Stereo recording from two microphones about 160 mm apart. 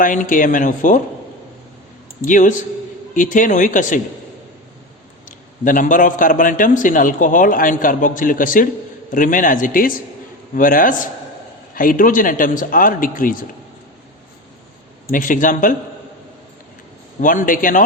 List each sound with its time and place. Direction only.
0.0 s a man's voice: 55° left (ahead or behind)
2.2 s a man's voice: 55° left (ahead or behind)
5.6 s a man's voice: 55° left (ahead or behind)
15.1 s a man's voice: 55° left (ahead or behind)
17.2 s a man's voice: 55° left (ahead or behind)